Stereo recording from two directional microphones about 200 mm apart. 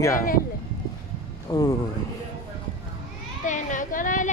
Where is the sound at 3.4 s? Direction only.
40° left (ahead or behind).